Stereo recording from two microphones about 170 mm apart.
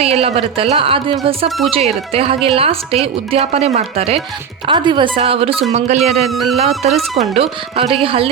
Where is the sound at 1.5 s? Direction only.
Centre (ahead or behind).